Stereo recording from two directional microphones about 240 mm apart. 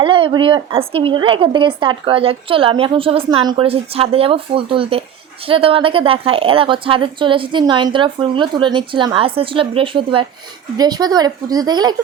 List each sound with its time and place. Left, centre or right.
0.0 s a woman's voice: right